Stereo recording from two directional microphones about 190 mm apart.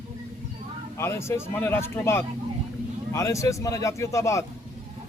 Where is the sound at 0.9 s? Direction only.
15° left (ahead or behind).